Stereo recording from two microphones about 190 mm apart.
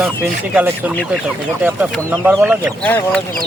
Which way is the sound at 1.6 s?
5° right (ahead or behind).